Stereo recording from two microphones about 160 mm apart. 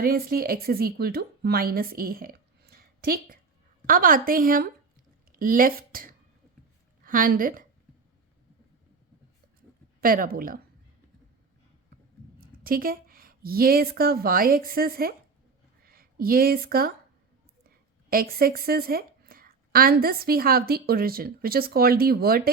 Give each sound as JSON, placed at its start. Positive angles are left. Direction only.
{"t": 0.0, "sound": "a woman's voice", "side_deg": -70}
{"t": 10.0, "sound": "a woman's voice", "side_deg": -65}
{"t": 12.6, "sound": "a woman's voice", "side_deg": -65}
{"t": 18.1, "sound": "a woman's voice", "side_deg": -70}